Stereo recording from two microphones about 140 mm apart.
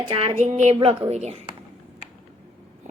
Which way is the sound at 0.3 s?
60° right (ahead or behind).